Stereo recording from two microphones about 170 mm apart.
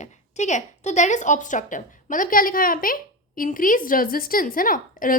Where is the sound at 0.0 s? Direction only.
45° left (ahead or behind).